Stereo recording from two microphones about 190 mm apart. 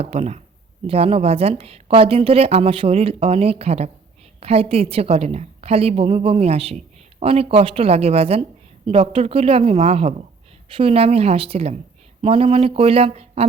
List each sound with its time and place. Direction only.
0.0 s a woman's voice: 35° right (ahead or behind)